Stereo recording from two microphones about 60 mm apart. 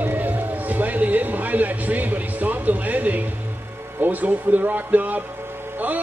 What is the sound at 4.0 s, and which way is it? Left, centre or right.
A man's voice, right.